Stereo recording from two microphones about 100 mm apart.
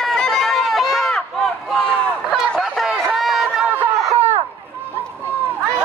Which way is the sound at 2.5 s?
Centre (ahead or behind).